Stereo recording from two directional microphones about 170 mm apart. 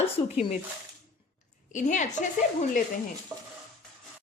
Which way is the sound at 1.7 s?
45° left (ahead or behind).